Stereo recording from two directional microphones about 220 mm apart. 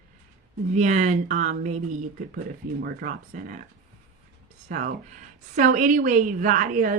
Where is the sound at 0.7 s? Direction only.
35° right (ahead or behind).